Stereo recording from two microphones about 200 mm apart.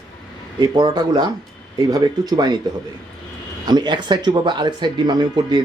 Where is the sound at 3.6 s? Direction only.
20° right (ahead or behind).